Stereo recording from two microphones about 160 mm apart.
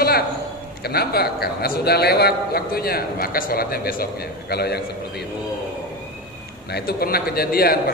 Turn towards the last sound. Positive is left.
turn(degrees=70)  # may be behind; listen again after turning